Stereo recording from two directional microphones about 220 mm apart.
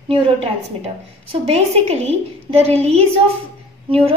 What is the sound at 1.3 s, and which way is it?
A woman's voice, 25° right (ahead or behind).